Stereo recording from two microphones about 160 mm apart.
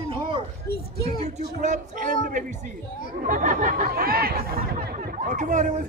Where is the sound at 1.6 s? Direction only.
50° right (ahead or behind).